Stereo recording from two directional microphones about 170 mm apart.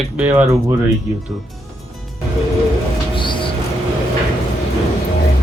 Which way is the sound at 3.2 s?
30° left (ahead or behind).